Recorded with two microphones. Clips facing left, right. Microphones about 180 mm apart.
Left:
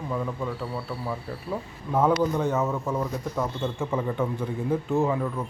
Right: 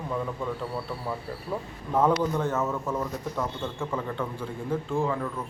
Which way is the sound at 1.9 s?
5° left (ahead or behind).